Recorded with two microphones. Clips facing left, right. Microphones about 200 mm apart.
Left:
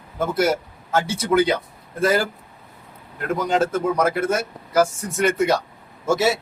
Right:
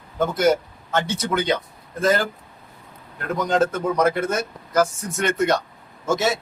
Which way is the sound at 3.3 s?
5° left (ahead or behind).